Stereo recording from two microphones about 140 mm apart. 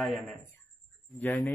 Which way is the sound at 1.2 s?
10° left (ahead or behind).